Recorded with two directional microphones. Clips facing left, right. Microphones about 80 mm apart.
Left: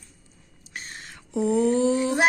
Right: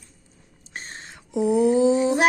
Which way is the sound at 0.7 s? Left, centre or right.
Right.